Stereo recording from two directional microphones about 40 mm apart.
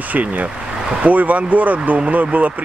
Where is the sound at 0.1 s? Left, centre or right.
Right.